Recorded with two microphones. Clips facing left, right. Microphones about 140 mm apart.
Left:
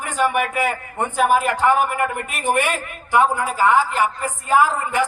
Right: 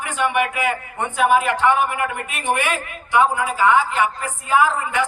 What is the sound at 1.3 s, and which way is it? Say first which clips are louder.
A man's voice: even; 40° left (ahead or behind).